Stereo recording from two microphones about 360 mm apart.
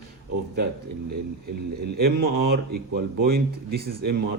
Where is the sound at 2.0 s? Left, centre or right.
Right.